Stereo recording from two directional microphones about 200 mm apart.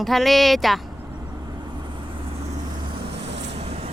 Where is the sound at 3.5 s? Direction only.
30° right (ahead or behind).